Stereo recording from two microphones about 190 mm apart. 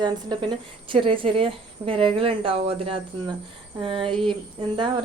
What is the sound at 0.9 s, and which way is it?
Speech, 25° right (ahead or behind).